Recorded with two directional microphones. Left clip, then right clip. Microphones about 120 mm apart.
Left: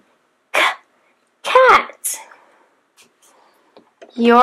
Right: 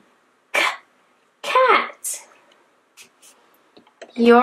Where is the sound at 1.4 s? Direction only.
45° left (ahead or behind).